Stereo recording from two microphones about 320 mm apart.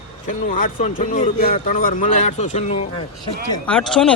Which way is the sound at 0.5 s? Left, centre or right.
Left.